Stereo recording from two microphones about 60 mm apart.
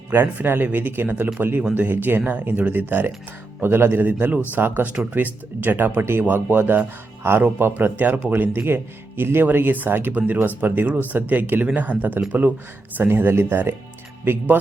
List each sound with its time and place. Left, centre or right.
0.1 s speech: right
8.6 s speech: right
13.0 s speech: right